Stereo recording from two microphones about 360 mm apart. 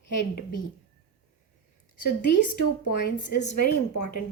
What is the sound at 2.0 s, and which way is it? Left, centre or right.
A woman's voice, left.